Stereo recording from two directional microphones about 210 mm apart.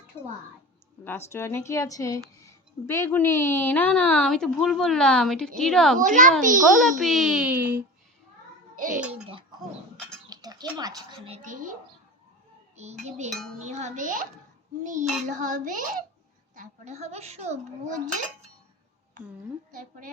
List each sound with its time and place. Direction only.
0.1 s a woman's voice: 10° left (ahead or behind)
6.0 s speech: 40° right (ahead or behind)
7.0 s a child's voice: centre (ahead or behind)
8.7 s a sound: 40° right (ahead or behind)
9.0 s a child's voice: 5° right (ahead or behind)
10.2 s speech: 20° right (ahead or behind)
11.3 s speech: 40° right (ahead or behind)
15.3 s speech: 35° right (ahead or behind)